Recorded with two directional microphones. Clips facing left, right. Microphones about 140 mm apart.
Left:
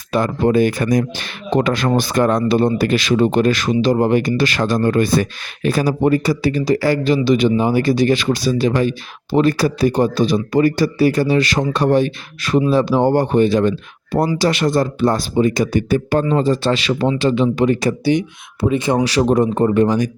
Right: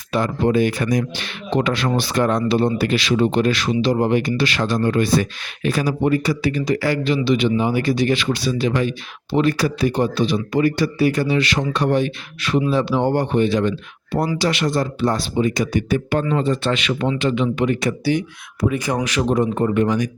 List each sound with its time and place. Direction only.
0.1 s speech: 45° left (ahead or behind)
18.0 s speech: 20° left (ahead or behind)